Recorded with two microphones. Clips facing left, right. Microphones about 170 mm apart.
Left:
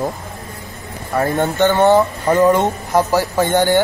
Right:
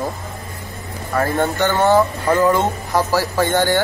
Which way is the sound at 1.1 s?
20° left (ahead or behind).